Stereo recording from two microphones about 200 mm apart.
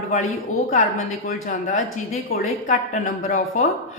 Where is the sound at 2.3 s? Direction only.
40° left (ahead or behind).